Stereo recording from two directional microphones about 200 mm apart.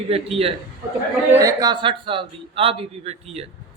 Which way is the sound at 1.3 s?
15° right (ahead or behind).